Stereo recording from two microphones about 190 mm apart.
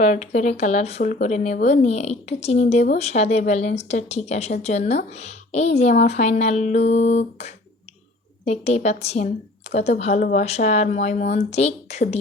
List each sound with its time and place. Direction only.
0.0 s speech: 40° left (ahead or behind)